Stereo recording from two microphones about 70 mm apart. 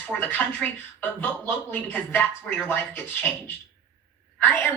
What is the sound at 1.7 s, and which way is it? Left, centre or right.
Speech, left.